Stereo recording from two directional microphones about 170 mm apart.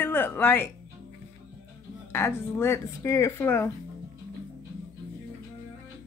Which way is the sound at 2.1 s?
15° left (ahead or behind).